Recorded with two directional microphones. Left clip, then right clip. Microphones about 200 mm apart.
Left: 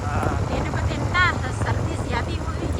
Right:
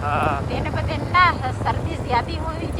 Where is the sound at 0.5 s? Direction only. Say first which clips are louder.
Right 1 dB; 15° right (ahead or behind).